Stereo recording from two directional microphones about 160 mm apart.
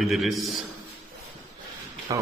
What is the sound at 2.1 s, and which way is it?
Speech, 25° right (ahead or behind).